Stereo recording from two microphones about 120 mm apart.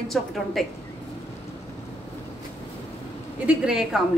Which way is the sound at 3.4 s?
5° right (ahead or behind).